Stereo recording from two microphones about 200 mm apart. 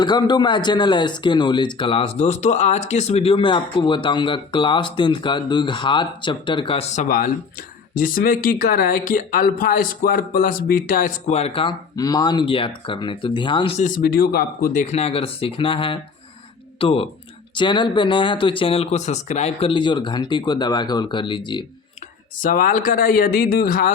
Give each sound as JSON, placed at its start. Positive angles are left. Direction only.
{"t": 0.0, "sound": "speech", "side_deg": 20}
{"t": 13.8, "sound": "speech", "side_deg": 45}
{"t": 22.4, "sound": "speech", "side_deg": 45}